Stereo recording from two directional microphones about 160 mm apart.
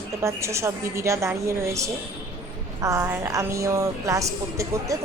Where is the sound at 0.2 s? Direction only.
15° right (ahead or behind).